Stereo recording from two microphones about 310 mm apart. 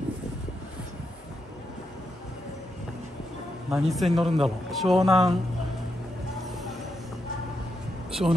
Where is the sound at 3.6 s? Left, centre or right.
Centre.